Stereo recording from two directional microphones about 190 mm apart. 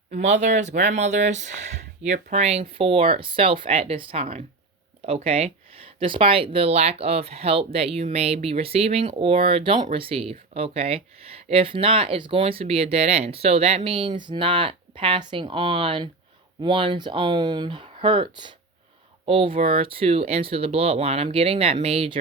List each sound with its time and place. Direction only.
0.1 s speech: 40° right (ahead or behind)